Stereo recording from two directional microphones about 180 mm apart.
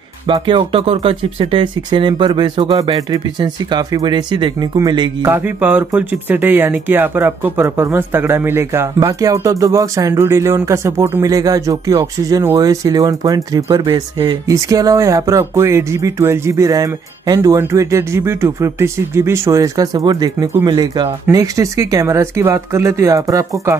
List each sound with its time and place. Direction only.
0.3 s speech: 25° right (ahead or behind)
5.2 s speech: 10° right (ahead or behind)